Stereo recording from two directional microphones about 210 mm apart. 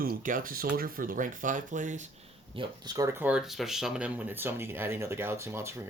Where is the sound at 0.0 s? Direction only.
40° right (ahead or behind).